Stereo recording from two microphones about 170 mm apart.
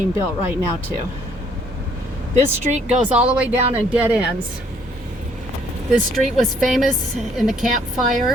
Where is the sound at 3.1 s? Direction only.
5° right (ahead or behind).